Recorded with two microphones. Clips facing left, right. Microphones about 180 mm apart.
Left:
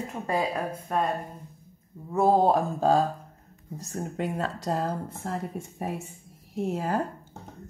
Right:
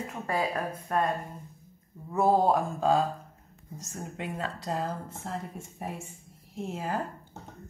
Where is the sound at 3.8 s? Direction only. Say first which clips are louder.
Left 6 dB; 40° left (ahead or behind).